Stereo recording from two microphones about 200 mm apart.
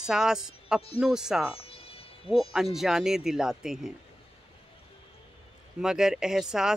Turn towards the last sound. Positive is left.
turn(degrees=-5)  # may be behind; listen again after turning